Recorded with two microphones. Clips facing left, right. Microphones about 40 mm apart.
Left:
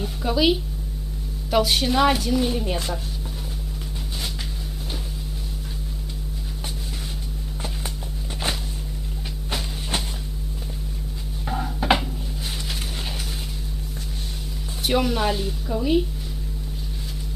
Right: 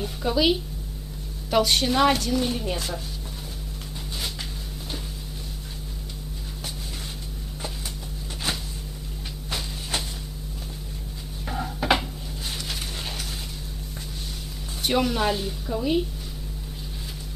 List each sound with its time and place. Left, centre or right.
0.0 s speech: centre
8.5 s a sound: left
11.4 s dishes: centre
14.8 s speech: centre